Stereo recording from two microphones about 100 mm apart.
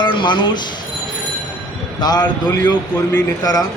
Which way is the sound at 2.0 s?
45° left (ahead or behind).